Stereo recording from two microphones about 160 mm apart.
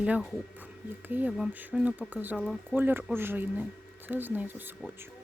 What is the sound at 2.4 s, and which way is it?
Speech, 5° left (ahead or behind).